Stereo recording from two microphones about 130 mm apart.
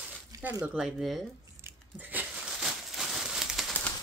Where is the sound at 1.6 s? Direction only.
15° right (ahead or behind).